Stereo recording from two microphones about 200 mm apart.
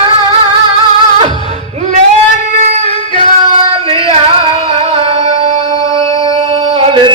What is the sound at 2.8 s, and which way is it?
Yodeling, 30° left (ahead or behind).